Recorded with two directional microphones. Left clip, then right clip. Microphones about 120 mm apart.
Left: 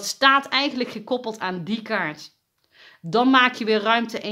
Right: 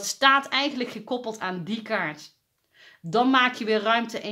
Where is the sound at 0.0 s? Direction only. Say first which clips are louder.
Left 2 dB; 35° left (ahead or behind).